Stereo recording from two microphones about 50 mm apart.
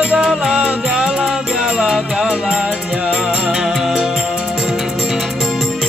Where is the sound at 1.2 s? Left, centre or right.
Centre.